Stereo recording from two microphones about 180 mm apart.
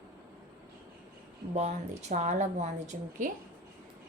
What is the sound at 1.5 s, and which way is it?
A woman's voice, 40° right (ahead or behind).